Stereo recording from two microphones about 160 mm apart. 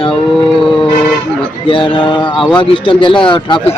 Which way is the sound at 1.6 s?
35° left (ahead or behind).